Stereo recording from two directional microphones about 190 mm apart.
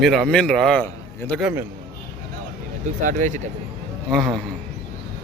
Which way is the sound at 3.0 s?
40° right (ahead or behind).